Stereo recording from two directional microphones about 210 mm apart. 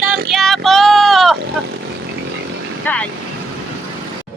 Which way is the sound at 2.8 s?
5° left (ahead or behind).